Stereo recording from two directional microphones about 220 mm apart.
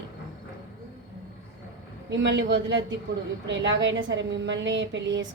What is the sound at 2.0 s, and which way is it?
A woman's voice, 55° right (ahead or behind).